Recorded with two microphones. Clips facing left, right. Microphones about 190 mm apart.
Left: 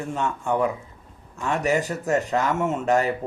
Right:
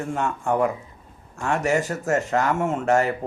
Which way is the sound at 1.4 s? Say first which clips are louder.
Right 1 dB; 15° left (ahead or behind).